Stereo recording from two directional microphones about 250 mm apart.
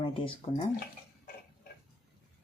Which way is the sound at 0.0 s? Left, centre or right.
Left.